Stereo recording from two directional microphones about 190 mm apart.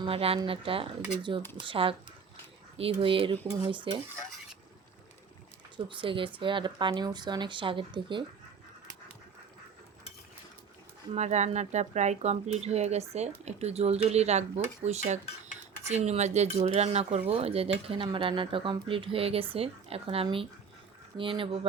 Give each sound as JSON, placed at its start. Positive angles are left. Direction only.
{"t": 0.0, "sound": "speech", "side_deg": -30}
{"t": 5.7, "sound": "speech", "side_deg": -25}
{"t": 11.1, "sound": "speech", "side_deg": -35}